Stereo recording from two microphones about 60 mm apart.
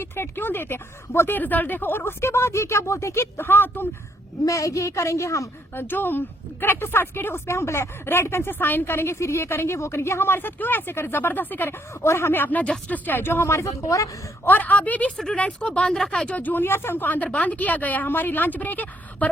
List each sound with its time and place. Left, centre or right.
0.0 s speech: left
1.4 s speech: left
3.3 s speech: left
4.4 s a woman's voice: left
5.7 s speech: left
7.4 s speech: left
12.0 s speech: left
14.4 s speech: left
16.4 s speech: left